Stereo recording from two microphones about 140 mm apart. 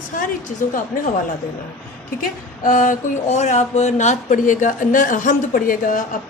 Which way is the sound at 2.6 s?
65° left (ahead or behind).